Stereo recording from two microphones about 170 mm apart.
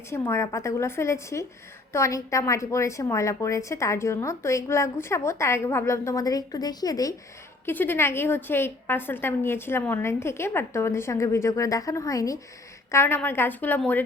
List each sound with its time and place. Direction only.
0.1 s a woman's voice: 15° left (ahead or behind)